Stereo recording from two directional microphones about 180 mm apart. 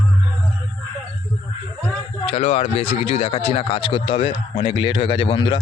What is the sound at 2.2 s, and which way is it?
Speech, 35° left (ahead or behind).